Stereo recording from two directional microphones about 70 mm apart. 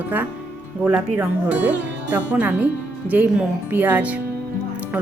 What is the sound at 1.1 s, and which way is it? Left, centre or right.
Speech, right.